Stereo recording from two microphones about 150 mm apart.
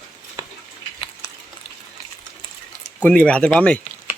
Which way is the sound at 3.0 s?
10° left (ahead or behind).